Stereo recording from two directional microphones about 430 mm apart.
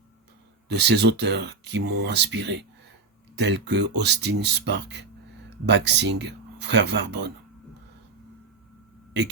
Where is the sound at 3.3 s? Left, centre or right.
Right.